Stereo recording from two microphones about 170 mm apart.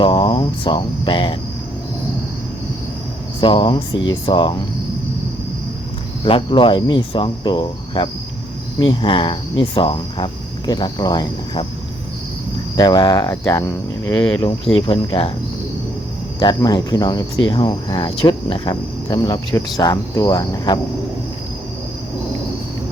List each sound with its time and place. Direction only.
0.0 s speech: 30° left (ahead or behind)
3.4 s speech: 30° left (ahead or behind)
6.2 s speech: 30° left (ahead or behind)
12.7 s speech: 25° left (ahead or behind)
14.4 s cricket: 30° left (ahead or behind)
16.4 s speech: 25° left (ahead or behind)